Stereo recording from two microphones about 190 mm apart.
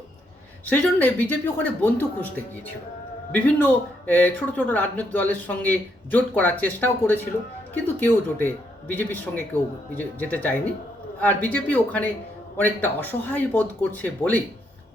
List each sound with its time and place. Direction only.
0.6 s speech: 10° left (ahead or behind)